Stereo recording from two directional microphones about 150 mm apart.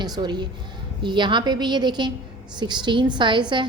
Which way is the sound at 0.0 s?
30° right (ahead or behind).